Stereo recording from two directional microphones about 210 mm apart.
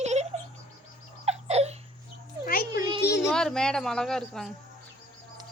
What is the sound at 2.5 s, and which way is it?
Speech, 45° left (ahead or behind).